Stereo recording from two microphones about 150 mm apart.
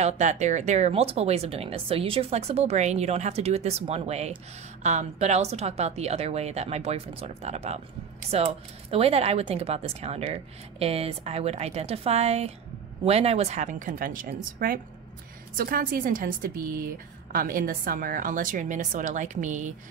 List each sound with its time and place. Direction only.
0.0 s a woman's voice: 50° right (ahead or behind)